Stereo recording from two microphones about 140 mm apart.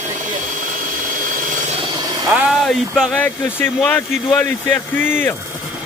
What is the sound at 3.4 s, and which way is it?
Speech, 15° left (ahead or behind).